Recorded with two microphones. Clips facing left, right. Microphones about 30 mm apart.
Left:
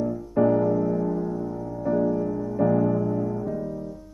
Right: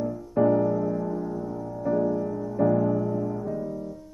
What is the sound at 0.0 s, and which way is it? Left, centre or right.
Music, centre.